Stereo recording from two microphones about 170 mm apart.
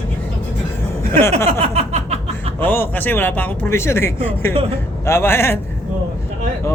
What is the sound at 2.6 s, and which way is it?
Speech, 10° left (ahead or behind).